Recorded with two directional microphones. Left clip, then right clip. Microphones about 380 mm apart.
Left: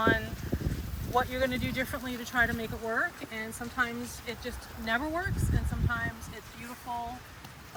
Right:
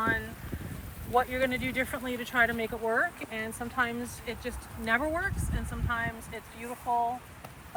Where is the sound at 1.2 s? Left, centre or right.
Centre.